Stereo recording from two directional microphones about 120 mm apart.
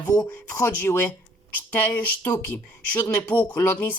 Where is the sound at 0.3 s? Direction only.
15° left (ahead or behind).